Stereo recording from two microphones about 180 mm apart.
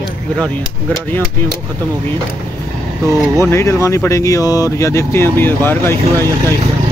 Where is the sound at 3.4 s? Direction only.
15° left (ahead or behind).